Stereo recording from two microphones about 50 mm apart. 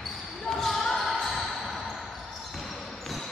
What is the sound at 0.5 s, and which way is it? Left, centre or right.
Basketball bounce, centre.